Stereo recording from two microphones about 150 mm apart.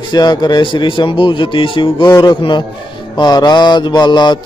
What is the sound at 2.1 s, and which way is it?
Mantra, 20° left (ahead or behind).